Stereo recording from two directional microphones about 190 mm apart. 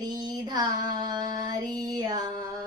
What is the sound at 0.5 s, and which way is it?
Female singing, 20° right (ahead or behind).